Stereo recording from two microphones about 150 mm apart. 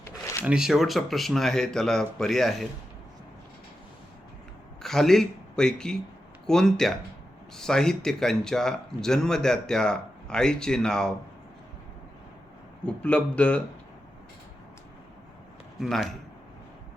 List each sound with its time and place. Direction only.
0.4 s speech: 5° right (ahead or behind)
4.8 s speech: centre (ahead or behind)
12.8 s speech: 10° left (ahead or behind)
15.8 s speech: centre (ahead or behind)